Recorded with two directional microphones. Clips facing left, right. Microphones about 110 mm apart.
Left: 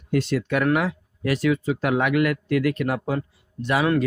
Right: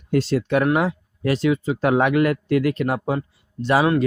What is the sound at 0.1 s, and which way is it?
Speech, 30° right (ahead or behind).